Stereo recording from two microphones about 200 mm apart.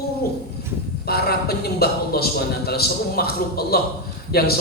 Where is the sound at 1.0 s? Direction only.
50° left (ahead or behind).